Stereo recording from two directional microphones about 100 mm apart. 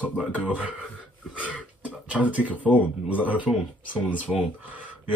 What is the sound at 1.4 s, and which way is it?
Speech, 15° left (ahead or behind).